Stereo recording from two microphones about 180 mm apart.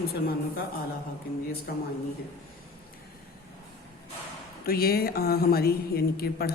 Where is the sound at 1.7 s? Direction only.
55° left (ahead or behind).